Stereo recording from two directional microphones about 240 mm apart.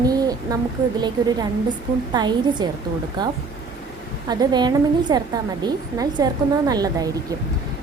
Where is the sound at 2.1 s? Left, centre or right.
Centre.